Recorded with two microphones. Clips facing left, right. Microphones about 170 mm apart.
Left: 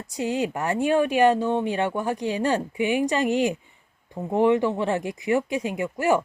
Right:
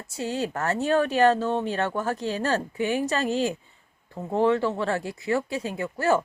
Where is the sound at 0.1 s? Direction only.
15° left (ahead or behind).